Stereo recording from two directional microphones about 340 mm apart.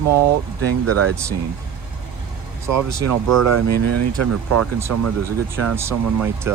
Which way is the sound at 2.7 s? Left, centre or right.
Right.